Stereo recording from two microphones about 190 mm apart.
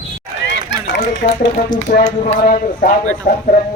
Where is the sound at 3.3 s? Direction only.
35° left (ahead or behind).